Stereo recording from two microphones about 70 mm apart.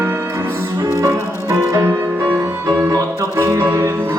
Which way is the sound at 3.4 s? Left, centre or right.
Right.